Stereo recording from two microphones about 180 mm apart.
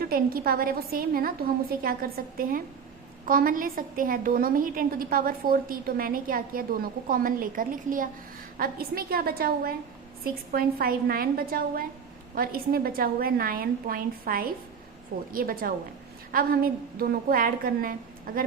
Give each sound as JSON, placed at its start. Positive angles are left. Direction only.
{"t": 0.0, "sound": "a woman's voice", "side_deg": -55}